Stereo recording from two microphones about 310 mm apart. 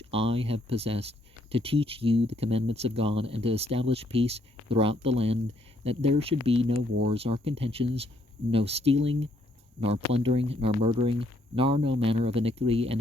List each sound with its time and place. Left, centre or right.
0.1 s speech: centre